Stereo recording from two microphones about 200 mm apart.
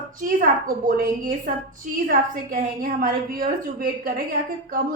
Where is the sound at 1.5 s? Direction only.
40° right (ahead or behind).